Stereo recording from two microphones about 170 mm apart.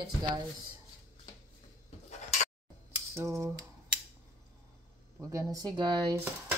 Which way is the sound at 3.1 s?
15° right (ahead or behind).